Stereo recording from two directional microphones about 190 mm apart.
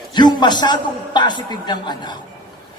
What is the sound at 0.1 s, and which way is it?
A woman's voice, 20° left (ahead or behind).